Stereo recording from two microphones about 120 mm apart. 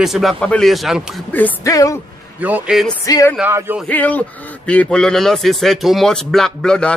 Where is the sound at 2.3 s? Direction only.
15° right (ahead or behind).